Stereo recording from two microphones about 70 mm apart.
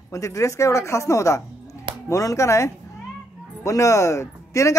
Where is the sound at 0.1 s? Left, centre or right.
Left.